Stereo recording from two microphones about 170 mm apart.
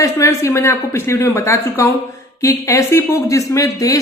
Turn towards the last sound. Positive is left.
turn(degrees=20)  # may be behind; listen again after turning